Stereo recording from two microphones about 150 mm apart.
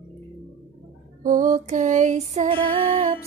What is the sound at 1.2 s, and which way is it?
Music, 65° right (ahead or behind).